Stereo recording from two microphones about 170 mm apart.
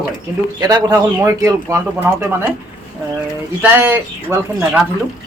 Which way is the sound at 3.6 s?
10° right (ahead or behind).